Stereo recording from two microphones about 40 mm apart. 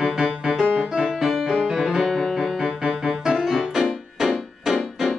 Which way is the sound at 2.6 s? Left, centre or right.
Centre.